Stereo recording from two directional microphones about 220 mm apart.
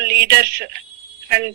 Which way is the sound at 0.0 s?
45° right (ahead or behind).